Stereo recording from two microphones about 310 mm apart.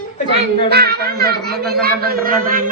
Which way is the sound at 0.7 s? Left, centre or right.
Right.